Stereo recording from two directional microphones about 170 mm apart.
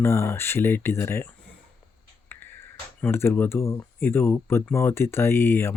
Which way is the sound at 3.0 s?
10° left (ahead or behind).